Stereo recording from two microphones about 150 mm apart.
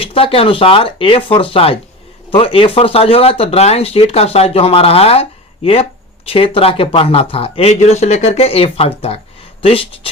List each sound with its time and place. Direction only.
0.0 s speech: 40° left (ahead or behind)